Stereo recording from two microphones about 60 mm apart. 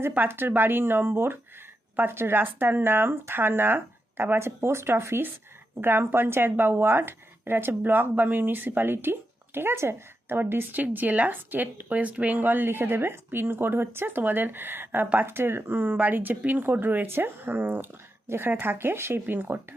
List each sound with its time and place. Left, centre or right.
0.2 s speech: right